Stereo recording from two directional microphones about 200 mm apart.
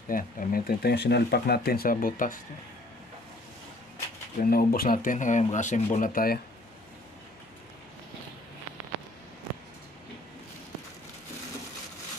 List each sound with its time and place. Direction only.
0.1 s speech: 45° left (ahead or behind)
4.4 s speech: 45° left (ahead or behind)